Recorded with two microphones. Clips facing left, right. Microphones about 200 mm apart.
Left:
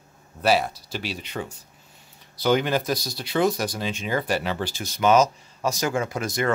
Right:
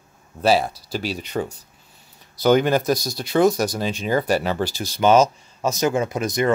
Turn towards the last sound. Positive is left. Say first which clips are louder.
# right 4 dB
turn(degrees=-20)  # may be behind; listen again after turning